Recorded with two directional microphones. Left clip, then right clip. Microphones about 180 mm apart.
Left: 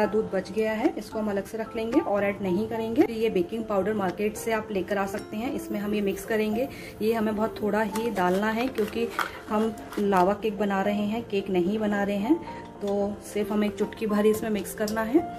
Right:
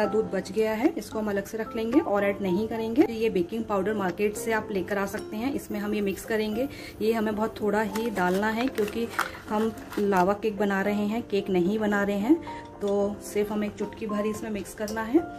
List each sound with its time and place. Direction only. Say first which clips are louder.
0.0 s a woman's voice: even; 15° right (ahead or behind)
13.7 s a woman's voice: left 4 dB; 20° left (ahead or behind)